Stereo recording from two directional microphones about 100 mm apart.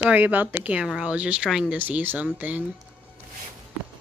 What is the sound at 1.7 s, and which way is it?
Speech, 15° right (ahead or behind).